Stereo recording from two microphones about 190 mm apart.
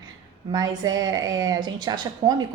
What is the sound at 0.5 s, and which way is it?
Speech, 20° right (ahead or behind).